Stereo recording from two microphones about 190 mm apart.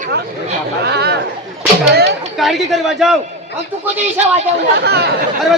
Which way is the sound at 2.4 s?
Centre (ahead or behind).